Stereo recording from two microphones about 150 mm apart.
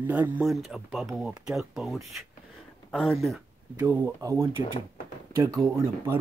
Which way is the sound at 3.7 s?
15° right (ahead or behind).